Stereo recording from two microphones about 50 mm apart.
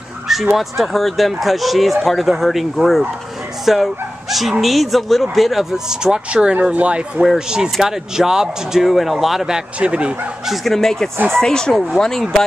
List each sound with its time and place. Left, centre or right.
0.6 s speech: centre; by 7.1 s right
7.2 s speech: centre
9.8 s speech: right
10.4 s speech: centre